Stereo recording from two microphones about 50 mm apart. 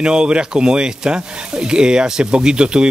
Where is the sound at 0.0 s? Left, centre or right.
Centre.